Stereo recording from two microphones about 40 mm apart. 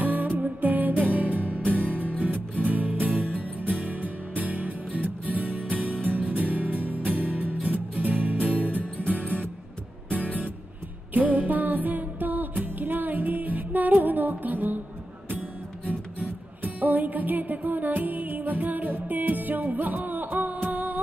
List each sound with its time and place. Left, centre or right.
0.0 s music: right
1.7 s music: left
2.6 s music: right
9.2 s music: left
11.1 s music: right
16.2 s music: right